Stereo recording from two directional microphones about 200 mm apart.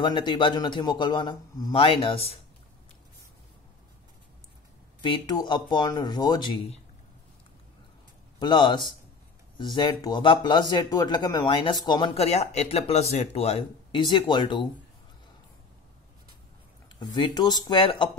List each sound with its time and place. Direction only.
0.0 s speech: 25° left (ahead or behind)
5.0 s speech: 20° left (ahead or behind)
8.4 s speech: 20° left (ahead or behind)
17.0 s speech: 20° left (ahead or behind)